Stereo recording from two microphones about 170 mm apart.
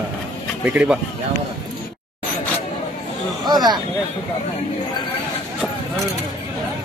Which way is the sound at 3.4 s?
25° right (ahead or behind).